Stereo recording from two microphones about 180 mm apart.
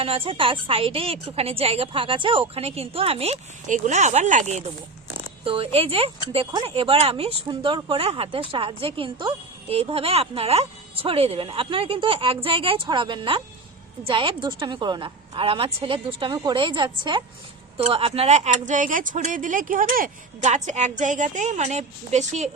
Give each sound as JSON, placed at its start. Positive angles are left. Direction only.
{"t": 0.3, "sound": "speech", "side_deg": -30}
{"t": 5.5, "sound": "a woman's voice", "side_deg": -30}